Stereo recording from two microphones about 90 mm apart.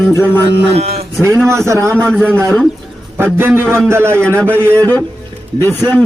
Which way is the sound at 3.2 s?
25° right (ahead or behind).